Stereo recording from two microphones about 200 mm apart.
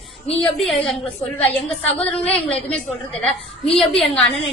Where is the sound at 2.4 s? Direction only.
30° left (ahead or behind).